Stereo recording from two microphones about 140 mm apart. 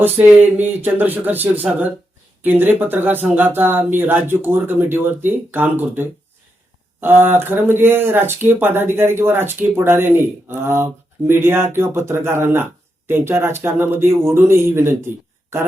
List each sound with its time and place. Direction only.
0.0 s speech: 10° right (ahead or behind)